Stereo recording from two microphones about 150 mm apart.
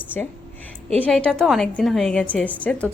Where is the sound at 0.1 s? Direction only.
5° left (ahead or behind).